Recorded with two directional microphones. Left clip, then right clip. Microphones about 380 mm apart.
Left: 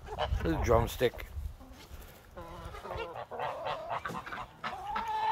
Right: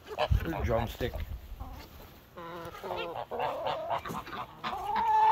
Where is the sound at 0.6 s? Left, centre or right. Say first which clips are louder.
Left 5 dB; centre.